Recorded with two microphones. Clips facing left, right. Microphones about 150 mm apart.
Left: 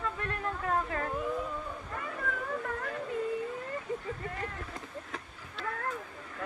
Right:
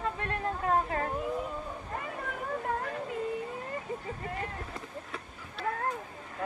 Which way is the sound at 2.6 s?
30° right (ahead or behind).